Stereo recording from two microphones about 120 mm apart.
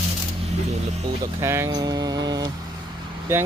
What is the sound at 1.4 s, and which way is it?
Speech, 20° right (ahead or behind).